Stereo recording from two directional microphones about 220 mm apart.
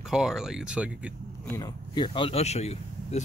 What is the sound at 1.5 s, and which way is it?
Speech, 15° left (ahead or behind).